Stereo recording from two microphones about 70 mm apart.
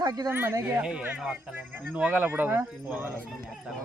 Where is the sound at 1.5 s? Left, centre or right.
Right.